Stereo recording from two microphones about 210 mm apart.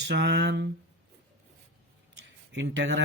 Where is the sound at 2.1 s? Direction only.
60° right (ahead or behind).